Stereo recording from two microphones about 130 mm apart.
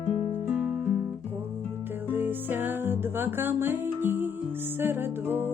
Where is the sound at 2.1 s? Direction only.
15° right (ahead or behind).